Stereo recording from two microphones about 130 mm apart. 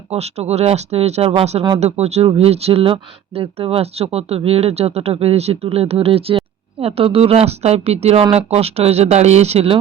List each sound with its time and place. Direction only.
0.1 s speech: 55° right (ahead or behind)